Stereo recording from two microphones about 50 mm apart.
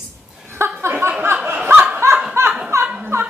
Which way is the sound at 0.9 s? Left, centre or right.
Right.